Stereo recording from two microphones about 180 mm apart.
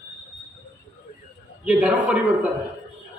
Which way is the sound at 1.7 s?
5° right (ahead or behind).